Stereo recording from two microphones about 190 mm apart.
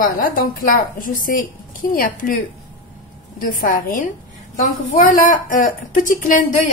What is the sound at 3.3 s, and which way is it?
A woman's voice, 45° left (ahead or behind).